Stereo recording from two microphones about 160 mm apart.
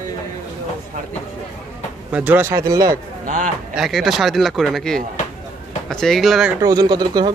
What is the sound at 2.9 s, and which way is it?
Speech, 55° right (ahead or behind).